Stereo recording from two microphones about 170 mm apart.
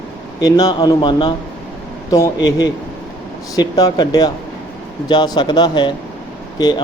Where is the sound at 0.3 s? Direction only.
25° left (ahead or behind).